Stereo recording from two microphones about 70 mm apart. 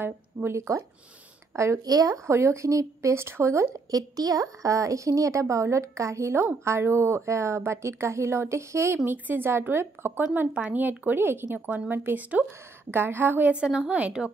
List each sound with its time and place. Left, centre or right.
0.0 s speech: right
0.6 s a woman's voice: right
3.9 s a woman's voice: right
13.5 s a woman's voice: centre